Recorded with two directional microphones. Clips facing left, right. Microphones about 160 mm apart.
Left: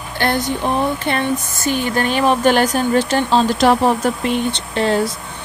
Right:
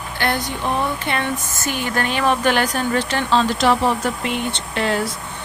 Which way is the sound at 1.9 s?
35° left (ahead or behind).